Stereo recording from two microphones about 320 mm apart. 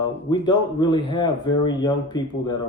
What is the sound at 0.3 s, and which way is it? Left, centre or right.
Speech, centre.